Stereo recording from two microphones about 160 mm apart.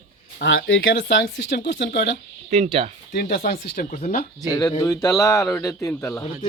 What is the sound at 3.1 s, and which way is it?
Speech, 70° left (ahead or behind).